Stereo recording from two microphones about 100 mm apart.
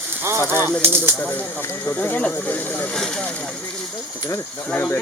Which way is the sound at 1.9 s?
20° left (ahead or behind).